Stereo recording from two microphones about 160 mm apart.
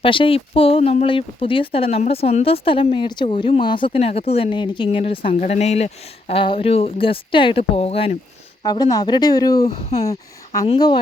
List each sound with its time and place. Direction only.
0.0 s speech: 30° left (ahead or behind)
5.3 s speech: 45° left (ahead or behind)
8.6 s speech: 25° left (ahead or behind)